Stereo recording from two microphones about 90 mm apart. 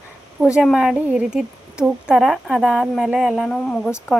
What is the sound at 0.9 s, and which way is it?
Speech, 20° right (ahead or behind).